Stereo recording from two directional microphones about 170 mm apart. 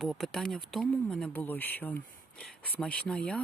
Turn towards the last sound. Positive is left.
turn(degrees=5)  # may be behind; listen again after turning